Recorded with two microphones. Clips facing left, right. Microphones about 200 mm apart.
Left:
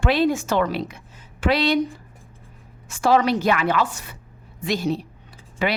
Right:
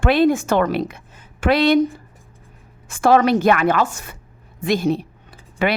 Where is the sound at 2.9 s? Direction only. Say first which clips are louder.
Right 4 dB; 55° right (ahead or behind).